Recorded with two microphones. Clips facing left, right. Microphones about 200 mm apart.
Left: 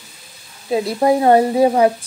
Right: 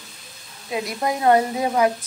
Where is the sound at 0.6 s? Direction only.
30° left (ahead or behind).